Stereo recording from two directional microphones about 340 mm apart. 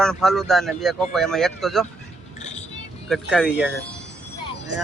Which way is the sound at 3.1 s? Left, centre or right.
Centre.